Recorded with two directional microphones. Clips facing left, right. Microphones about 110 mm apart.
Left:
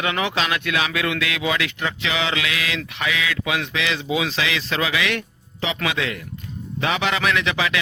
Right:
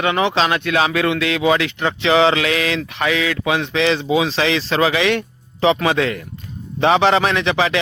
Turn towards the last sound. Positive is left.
turn(degrees=-35)  # may be behind; listen again after turning